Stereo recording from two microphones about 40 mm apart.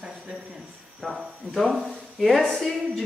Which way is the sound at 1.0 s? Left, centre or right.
Centre.